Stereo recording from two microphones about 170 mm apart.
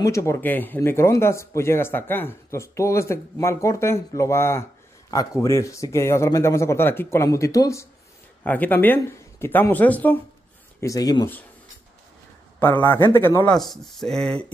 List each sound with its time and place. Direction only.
0.0 s speech: 15° left (ahead or behind)
10.8 s speech: 20° left (ahead or behind)
12.5 s speech: 10° left (ahead or behind)
13.6 s speech: centre (ahead or behind)